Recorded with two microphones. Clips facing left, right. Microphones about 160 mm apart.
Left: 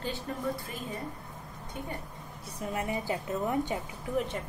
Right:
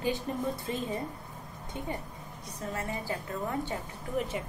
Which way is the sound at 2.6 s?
15° left (ahead or behind).